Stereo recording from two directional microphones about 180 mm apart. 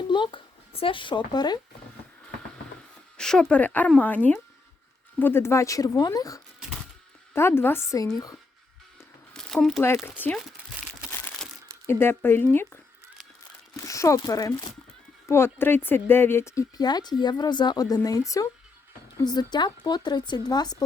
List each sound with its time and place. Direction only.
0.1 s a woman's voice: 25° left (ahead or behind)
3.2 s speech: 5° left (ahead or behind); by 8.4 s 20° left (ahead or behind)
9.3 s a sound: 5° left (ahead or behind)
10.2 s speech: 10° left (ahead or behind)
11.1 s crushing: 10° left (ahead or behind)
11.9 s speech: 10° left (ahead or behind)